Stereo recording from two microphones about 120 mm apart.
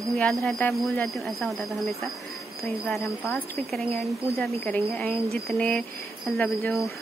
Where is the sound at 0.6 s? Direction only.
15° left (ahead or behind).